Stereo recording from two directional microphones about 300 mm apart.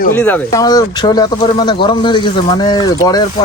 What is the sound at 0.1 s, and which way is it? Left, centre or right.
Speech, centre.